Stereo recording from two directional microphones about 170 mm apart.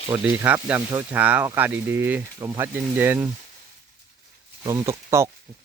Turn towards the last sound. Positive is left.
turn(degrees=-15)  # may be behind; listen again after turning